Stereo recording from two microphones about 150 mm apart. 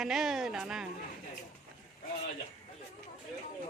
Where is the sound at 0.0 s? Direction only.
Centre (ahead or behind).